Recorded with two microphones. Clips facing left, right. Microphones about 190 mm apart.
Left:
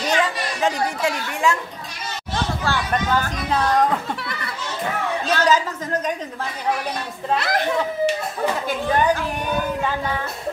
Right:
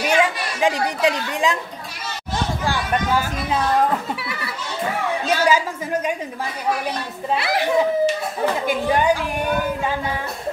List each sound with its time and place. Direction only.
0.0 s a woman's voice: 10° right (ahead or behind)
2.6 s a woman's voice: 10° right (ahead or behind)
4.1 s a sound: 5° right (ahead or behind)
5.2 s a woman's voice: 10° right (ahead or behind)
7.2 s a woman's voice: 5° right (ahead or behind)